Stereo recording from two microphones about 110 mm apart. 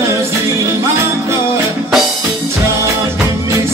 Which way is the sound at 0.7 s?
25° right (ahead or behind).